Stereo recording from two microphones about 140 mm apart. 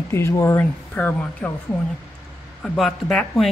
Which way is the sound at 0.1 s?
20° left (ahead or behind).